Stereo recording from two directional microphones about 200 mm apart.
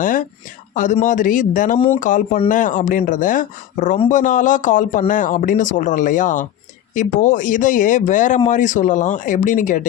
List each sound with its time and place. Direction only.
0.0 s speech: 40° left (ahead or behind)